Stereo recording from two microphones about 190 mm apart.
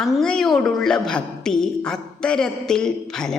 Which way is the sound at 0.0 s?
Centre (ahead or behind).